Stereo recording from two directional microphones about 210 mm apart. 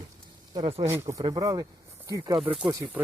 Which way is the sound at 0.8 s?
15° right (ahead or behind).